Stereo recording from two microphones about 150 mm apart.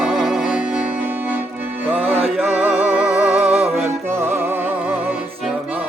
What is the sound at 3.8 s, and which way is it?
Music, 15° right (ahead or behind).